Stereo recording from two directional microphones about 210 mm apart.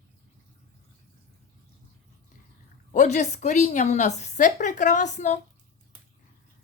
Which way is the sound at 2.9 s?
35° left (ahead or behind).